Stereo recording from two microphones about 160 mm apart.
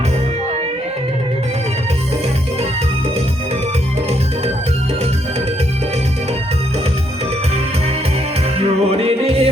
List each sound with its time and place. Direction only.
8.5 s music: 40° right (ahead or behind)